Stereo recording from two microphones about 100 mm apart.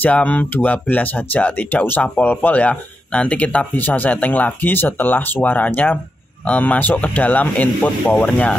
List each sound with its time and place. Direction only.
0.0 s speech: 15° left (ahead or behind)